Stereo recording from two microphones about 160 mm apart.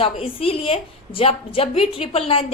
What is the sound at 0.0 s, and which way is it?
A woman's voice, 35° left (ahead or behind).